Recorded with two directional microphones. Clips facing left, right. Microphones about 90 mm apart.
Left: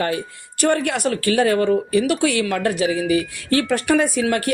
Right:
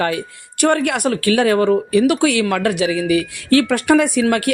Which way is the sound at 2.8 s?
40° left (ahead or behind).